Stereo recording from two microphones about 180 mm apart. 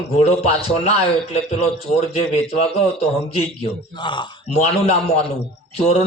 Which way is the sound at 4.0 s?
25° left (ahead or behind).